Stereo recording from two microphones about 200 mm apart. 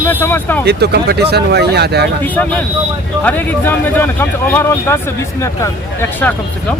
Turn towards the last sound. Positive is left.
turn(degrees=10)  # may be behind; listen again after turning